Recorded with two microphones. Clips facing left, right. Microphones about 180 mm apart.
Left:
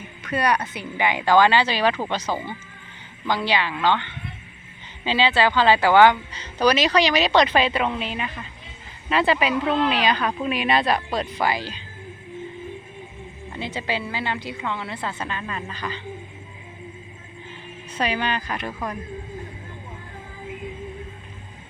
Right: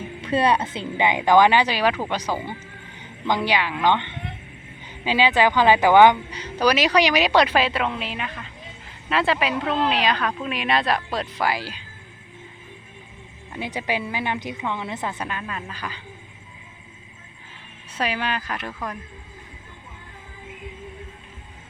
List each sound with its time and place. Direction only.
0.2 s a woman's voice: 25° right (ahead or behind); by 11.8 s 5° right (ahead or behind)
13.5 s a woman's voice: 15° right (ahead or behind)
17.9 s speech: 5° right (ahead or behind)